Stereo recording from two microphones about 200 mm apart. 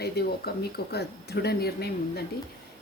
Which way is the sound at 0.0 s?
50° left (ahead or behind).